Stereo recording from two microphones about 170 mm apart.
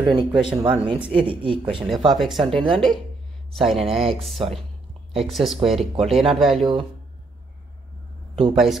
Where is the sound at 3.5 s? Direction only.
Centre (ahead or behind).